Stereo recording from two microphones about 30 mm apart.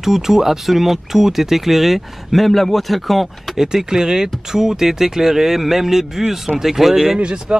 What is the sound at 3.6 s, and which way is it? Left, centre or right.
Speech, right.